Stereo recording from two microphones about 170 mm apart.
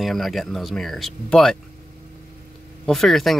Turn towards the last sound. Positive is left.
turn(degrees=0)  # may be behind; listen again after turning